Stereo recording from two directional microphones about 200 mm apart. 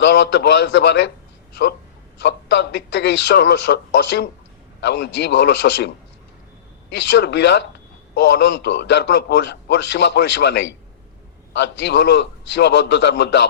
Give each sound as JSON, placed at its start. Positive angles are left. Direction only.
{"t": 0.0, "sound": "a man's voice", "side_deg": 60}
{"t": 2.2, "sound": "a man's voice", "side_deg": 60}
{"t": 6.9, "sound": "a man's voice", "side_deg": 60}